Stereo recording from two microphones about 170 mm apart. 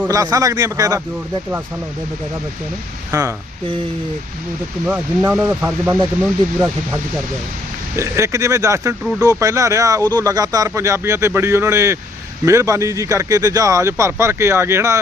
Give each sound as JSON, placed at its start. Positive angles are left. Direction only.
{"t": 0.0, "sound": "a man's voice", "side_deg": -20}
{"t": 3.1, "sound": "speech", "side_deg": -15}
{"t": 4.9, "sound": "speech", "side_deg": -10}
{"t": 7.9, "sound": "speech", "side_deg": -15}